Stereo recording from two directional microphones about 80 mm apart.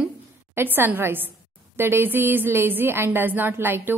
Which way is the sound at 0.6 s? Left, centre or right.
Right.